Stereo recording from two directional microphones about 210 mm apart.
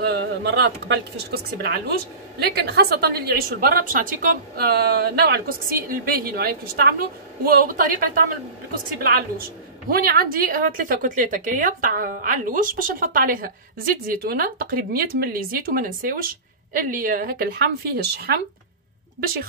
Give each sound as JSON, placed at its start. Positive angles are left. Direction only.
{"t": 0.0, "sound": "a woman's voice", "side_deg": -50}
{"t": 9.8, "sound": "a woman's voice", "side_deg": -45}